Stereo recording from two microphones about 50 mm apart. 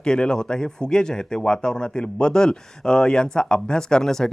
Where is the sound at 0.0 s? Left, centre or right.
Centre.